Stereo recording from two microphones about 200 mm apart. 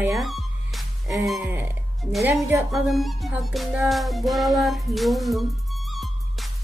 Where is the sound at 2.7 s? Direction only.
Centre (ahead or behind).